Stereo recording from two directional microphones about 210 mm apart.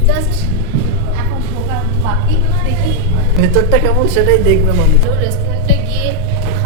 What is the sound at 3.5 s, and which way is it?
Speech, 15° left (ahead or behind).